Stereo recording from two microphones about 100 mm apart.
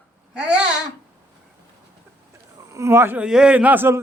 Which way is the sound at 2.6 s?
30° right (ahead or behind).